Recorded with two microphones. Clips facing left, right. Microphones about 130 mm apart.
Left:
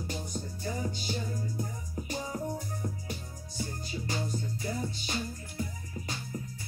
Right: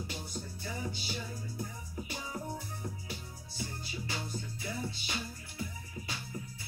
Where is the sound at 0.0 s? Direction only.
45° left (ahead or behind).